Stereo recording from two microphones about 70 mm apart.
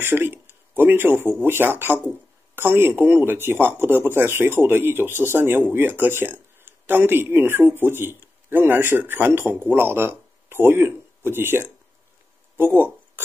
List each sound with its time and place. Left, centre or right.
0.0 s speech: right